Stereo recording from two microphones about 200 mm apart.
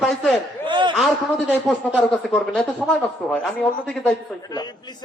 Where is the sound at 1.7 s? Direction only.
5° left (ahead or behind).